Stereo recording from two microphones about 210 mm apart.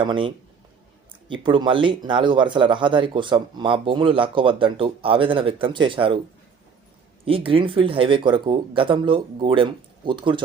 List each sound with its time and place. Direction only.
0.0 s speech: 25° right (ahead or behind)
7.3 s speech: 25° right (ahead or behind)